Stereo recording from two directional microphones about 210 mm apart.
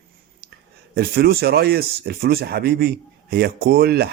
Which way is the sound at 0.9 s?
45° right (ahead or behind).